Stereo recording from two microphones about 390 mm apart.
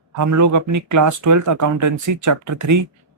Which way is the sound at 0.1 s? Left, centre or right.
Right.